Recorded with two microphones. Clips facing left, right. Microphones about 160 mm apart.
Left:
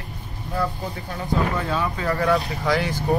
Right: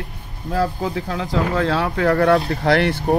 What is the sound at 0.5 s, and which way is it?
Speech, 90° right.